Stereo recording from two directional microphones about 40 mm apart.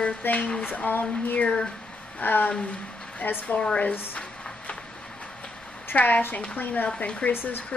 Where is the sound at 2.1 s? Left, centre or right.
Left.